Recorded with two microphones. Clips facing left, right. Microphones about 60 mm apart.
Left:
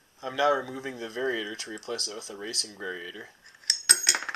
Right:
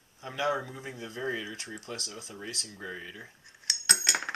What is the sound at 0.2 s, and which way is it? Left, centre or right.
Speech, left.